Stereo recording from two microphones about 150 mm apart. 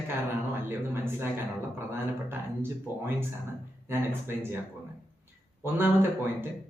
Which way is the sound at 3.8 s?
15° right (ahead or behind).